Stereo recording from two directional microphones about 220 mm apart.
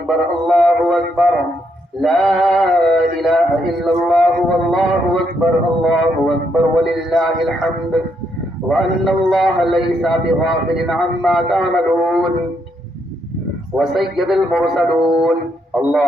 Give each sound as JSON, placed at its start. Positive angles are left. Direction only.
{"t": 0.1, "sound": "music", "side_deg": 0}
{"t": 2.0, "sound": "male singing", "side_deg": 0}
{"t": 3.8, "sound": "a sound", "side_deg": 0}
{"t": 8.7, "sound": "a man's voice", "side_deg": 0}
{"t": 13.7, "sound": "a man's voice", "side_deg": 0}